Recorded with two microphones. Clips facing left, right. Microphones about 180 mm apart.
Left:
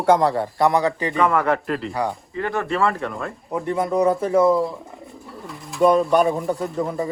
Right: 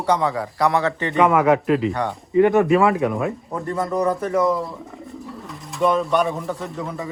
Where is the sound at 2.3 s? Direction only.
15° right (ahead or behind).